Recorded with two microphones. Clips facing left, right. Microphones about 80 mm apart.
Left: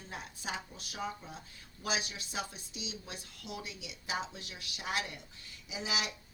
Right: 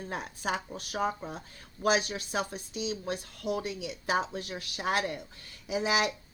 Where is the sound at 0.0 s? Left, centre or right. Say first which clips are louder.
Right 8 dB; right.